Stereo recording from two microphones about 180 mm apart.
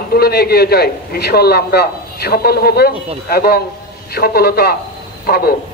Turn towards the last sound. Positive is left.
turn(degrees=55)  # may be behind; listen again after turning